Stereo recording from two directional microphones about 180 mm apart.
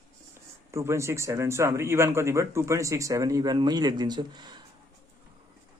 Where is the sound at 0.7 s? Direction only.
15° right (ahead or behind).